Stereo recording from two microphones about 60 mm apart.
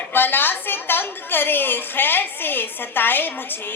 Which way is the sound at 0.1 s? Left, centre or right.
Left.